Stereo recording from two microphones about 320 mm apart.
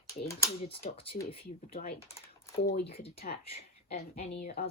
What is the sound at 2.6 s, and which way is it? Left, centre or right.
Speech, left.